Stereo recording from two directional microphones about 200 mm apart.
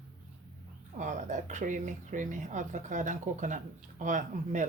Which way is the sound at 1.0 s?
40° right (ahead or behind).